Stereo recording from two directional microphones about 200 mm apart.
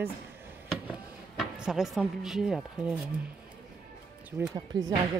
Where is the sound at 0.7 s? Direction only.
Centre (ahead or behind).